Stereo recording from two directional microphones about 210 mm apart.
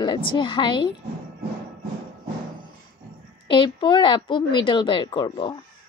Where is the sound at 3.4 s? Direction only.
25° left (ahead or behind).